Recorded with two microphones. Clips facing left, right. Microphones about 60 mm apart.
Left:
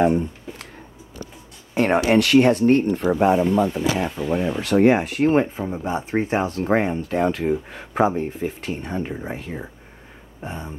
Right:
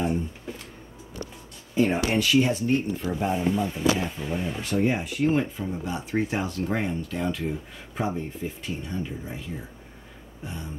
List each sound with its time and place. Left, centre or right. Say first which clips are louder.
0.0 s a sound: left 8 dB; left
1.7 s speech: left 6 dB; left
4.3 s speech: left 10 dB; left
5.3 s speech: left 6 dB; left
7.4 s speech: left 9 dB; left